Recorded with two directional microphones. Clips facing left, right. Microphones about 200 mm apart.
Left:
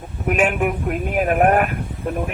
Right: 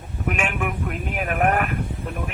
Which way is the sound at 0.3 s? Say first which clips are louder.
Left 9 dB; 40° left (ahead or behind).